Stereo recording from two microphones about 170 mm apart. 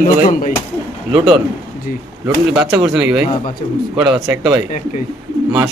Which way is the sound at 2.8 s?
5° right (ahead or behind).